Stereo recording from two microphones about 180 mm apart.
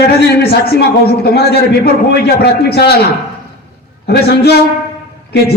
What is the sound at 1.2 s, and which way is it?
A man's voice, 60° left (ahead or behind).